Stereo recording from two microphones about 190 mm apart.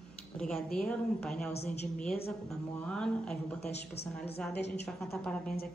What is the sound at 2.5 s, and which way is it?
Speech, 5° left (ahead or behind).